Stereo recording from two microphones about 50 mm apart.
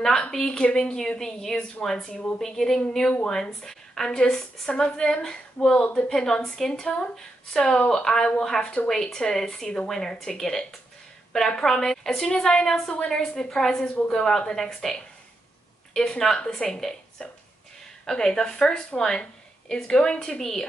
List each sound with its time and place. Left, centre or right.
0.3 s a woman's voice: centre
15.9 s a woman's voice: centre